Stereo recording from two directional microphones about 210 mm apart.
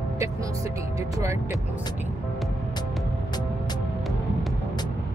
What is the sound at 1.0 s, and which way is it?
Speech, 15° right (ahead or behind).